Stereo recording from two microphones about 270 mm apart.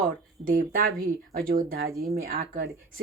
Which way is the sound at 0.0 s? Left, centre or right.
Right.